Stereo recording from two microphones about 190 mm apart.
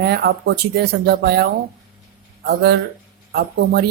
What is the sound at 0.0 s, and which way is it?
Speech, 60° right (ahead or behind).